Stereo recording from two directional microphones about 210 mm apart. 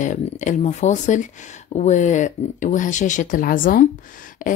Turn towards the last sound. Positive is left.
turn(degrees=40)  # may be behind; listen again after turning